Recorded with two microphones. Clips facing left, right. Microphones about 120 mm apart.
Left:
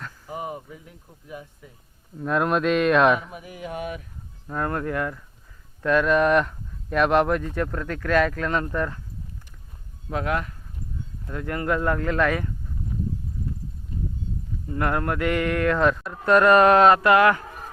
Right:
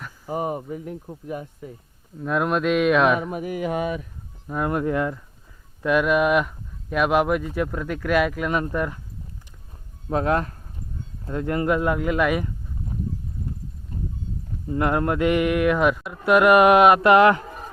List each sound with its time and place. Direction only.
0.3 s speech: 45° right (ahead or behind)
2.1 s speech: centre (ahead or behind)
3.2 s speech: 55° right (ahead or behind); by 3.8 s 85° right
4.4 s speech: 10° right (ahead or behind)
10.1 s speech: 35° right (ahead or behind)
11.3 s speech: 25° right (ahead or behind)
14.7 s speech: 20° right (ahead or behind)